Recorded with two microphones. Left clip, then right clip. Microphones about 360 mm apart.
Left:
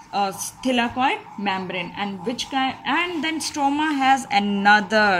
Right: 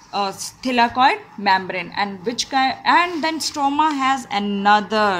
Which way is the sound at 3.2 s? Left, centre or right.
Right.